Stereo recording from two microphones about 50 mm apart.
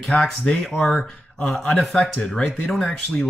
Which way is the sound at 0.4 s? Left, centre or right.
Centre.